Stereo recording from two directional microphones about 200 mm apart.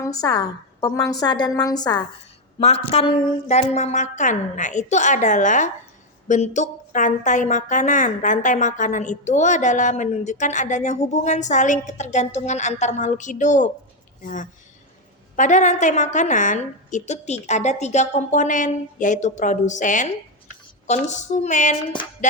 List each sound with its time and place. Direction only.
0.0 s a woman's voice: 20° left (ahead or behind)
2.9 s a woman's voice: 30° left (ahead or behind)
22.2 s music: 35° left (ahead or behind)